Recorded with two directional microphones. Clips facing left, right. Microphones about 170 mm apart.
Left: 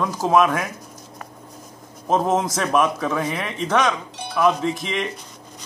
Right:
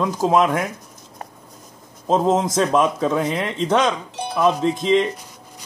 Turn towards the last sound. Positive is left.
turn(degrees=-25)  # may be behind; listen again after turning